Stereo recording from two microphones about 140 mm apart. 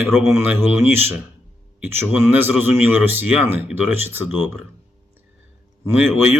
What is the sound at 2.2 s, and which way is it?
A man's voice, 15° right (ahead or behind).